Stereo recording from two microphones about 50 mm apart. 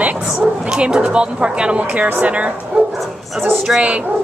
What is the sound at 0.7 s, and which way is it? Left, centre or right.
Speech, centre.